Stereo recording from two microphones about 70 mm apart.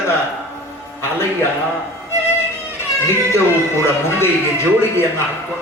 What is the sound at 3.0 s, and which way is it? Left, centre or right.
Speech, left.